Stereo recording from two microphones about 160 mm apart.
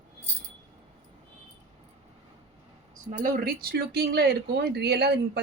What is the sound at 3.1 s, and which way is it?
A woman's voice, 60° right (ahead or behind).